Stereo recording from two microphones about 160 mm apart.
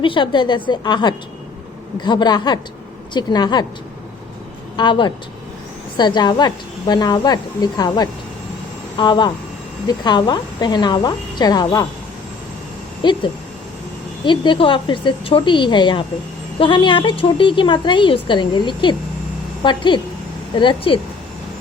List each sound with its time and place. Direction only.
0.0 s a woman's voice: 30° left (ahead or behind)
4.8 s a woman's voice: 30° left (ahead or behind)
13.0 s a woman's voice: 30° left (ahead or behind)
14.3 s a woman's voice: 30° left (ahead or behind)